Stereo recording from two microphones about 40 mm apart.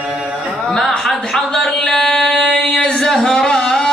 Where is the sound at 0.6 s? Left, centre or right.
Centre.